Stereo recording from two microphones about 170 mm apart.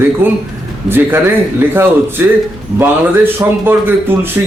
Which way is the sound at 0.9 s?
10° right (ahead or behind).